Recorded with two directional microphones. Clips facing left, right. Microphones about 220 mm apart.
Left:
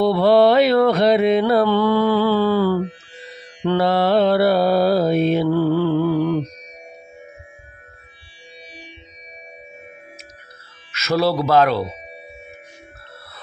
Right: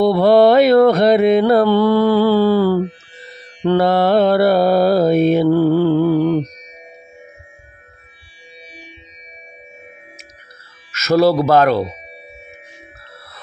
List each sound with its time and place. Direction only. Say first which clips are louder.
0.0 s mantra: right 3 dB; 45° right (ahead or behind)
10.9 s speech: right 6 dB; 45° right (ahead or behind)